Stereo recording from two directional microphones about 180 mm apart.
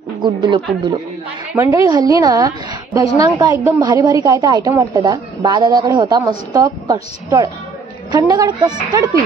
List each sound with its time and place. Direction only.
0.2 s a woman's voice: 25° right (ahead or behind)
1.5 s a woman's voice: 15° right (ahead or behind)